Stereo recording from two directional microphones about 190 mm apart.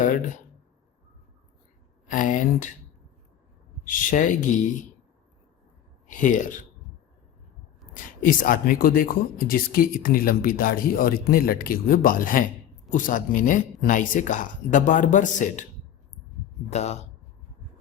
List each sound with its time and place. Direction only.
0.0 s speech: 45° left (ahead or behind)
2.0 s speech: 45° left (ahead or behind)
3.8 s speech: 45° left (ahead or behind)
6.1 s speech: 45° left (ahead or behind)
7.9 s speech: 45° left (ahead or behind)
16.6 s speech: 35° left (ahead or behind)